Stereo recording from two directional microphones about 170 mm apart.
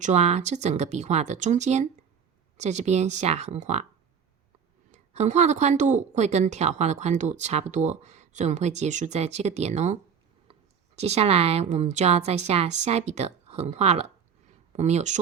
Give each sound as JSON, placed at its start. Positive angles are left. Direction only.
{"t": 0.0, "sound": "a woman's voice", "side_deg": -40}
{"t": 4.9, "sound": "a woman's voice", "side_deg": -40}